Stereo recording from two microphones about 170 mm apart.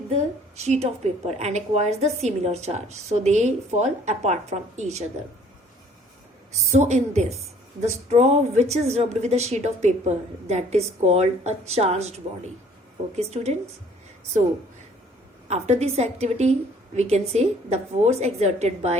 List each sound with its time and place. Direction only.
0.1 s a woman's voice: 40° right (ahead or behind)
6.5 s a woman's voice: 45° right (ahead or behind)
15.4 s a woman's voice: 40° right (ahead or behind)